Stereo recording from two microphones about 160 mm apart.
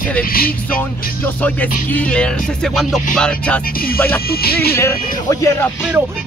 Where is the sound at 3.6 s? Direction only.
65° left (ahead or behind).